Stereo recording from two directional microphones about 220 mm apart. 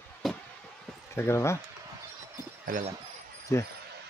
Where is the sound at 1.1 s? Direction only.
10° left (ahead or behind).